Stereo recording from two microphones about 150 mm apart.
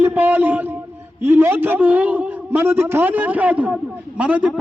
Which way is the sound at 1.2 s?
15° right (ahead or behind).